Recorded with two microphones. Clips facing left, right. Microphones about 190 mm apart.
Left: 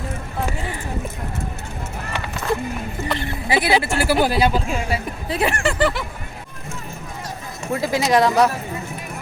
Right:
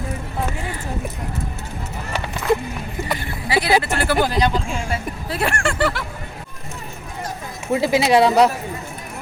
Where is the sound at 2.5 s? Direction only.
20° right (ahead or behind).